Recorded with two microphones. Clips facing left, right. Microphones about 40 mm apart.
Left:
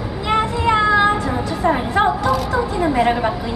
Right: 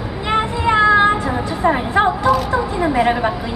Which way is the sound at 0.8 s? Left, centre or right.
Centre.